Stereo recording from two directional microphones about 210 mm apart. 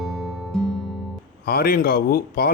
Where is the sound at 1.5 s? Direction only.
45° left (ahead or behind).